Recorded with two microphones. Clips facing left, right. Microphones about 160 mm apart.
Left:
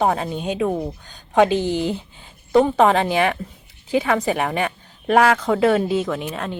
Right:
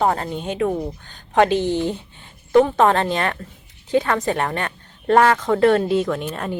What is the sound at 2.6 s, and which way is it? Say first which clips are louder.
A woman's voice: left 1 dB; 10° left (ahead or behind).